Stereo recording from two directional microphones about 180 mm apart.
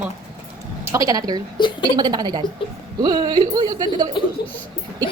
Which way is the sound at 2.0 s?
25° right (ahead or behind).